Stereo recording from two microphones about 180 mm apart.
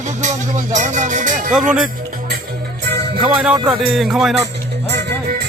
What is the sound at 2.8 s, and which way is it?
Music, 70° right (ahead or behind).